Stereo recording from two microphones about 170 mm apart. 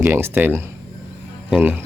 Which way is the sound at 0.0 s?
15° right (ahead or behind).